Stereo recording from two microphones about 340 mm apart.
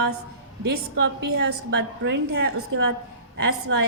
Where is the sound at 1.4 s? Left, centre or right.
Right.